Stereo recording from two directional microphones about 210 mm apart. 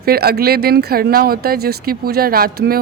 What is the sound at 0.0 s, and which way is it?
A woman's voice, 45° right (ahead or behind).